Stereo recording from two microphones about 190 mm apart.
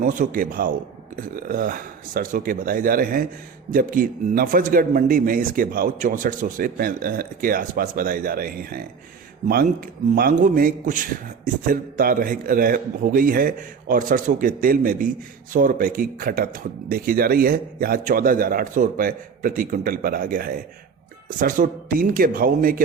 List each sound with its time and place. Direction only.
0.0 s a man's voice: 45° right (ahead or behind)